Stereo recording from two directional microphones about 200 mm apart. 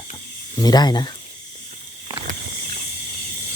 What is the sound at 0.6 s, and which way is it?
Speech, 20° left (ahead or behind).